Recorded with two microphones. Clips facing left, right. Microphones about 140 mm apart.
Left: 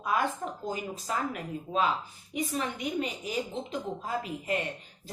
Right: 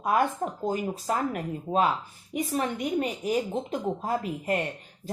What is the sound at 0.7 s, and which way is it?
Speech, 50° right (ahead or behind).